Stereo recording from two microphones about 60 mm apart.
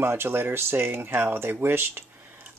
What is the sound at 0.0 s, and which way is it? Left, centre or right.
Speech, right.